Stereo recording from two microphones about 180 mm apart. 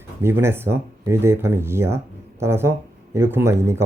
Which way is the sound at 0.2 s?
15° right (ahead or behind).